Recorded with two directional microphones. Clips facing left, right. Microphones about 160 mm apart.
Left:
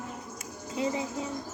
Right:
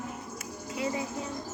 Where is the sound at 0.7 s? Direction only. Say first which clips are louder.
Left 2 dB; 25° left (ahead or behind).